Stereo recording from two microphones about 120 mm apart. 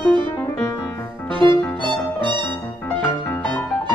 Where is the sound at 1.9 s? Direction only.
45° right (ahead or behind).